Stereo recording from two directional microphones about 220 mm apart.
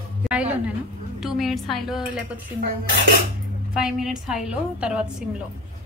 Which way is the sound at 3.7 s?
5° right (ahead or behind).